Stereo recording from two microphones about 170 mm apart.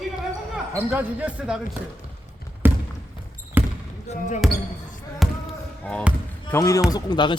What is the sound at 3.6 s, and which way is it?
Basketball bounce, 10° right (ahead or behind).